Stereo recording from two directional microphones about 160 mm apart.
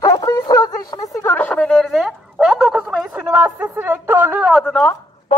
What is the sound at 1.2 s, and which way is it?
A woman's voice, 10° left (ahead or behind).